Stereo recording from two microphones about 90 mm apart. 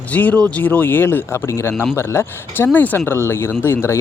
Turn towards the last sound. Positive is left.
turn(degrees=30)  # may be behind; listen again after turning